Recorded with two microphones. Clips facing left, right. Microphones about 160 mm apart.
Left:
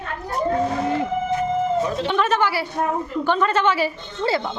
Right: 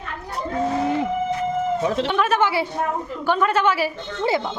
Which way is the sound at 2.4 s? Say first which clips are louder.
Right 1 dB; 20° right (ahead or behind).